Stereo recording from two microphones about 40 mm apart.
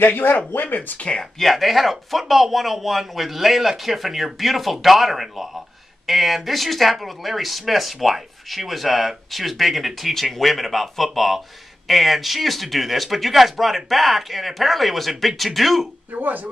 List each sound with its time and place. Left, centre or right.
0.0 s speech: left
0.7 s speech: left
1.4 s speech: centre
16.1 s speech: right